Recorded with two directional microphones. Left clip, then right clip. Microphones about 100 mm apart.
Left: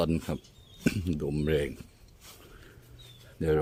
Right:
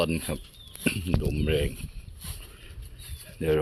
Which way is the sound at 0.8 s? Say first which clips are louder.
Right 2 dB; 65° left (ahead or behind).